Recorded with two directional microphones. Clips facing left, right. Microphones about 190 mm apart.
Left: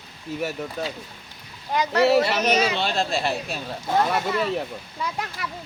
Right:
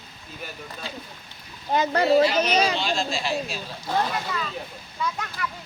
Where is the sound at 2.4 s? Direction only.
30° right (ahead or behind).